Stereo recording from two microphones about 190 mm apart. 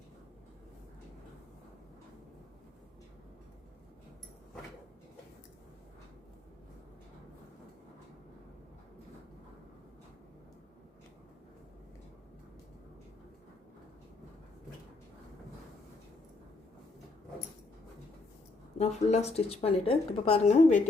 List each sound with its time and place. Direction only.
18.8 s a woman's voice: 35° left (ahead or behind)